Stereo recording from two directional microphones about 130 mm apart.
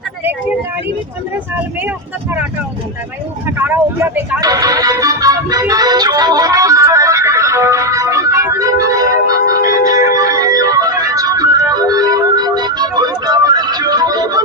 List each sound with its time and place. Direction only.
3.6 s speech: 15° right (ahead or behind)
4.4 s music: 30° right (ahead or behind)